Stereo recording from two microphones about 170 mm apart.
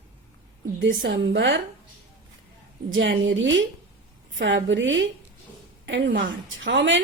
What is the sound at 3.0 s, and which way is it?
A woman's voice, 90° right.